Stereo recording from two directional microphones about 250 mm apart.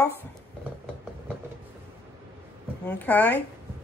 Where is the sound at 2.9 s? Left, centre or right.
Centre.